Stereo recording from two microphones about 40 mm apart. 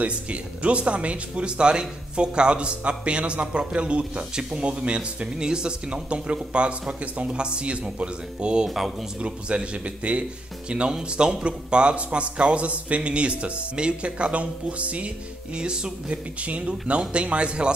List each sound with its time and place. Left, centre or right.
0.0 s speech: right
4.4 s speech: centre
8.6 s speech: centre
9.2 s speech: right
15.5 s speech: right
16.3 s speech: right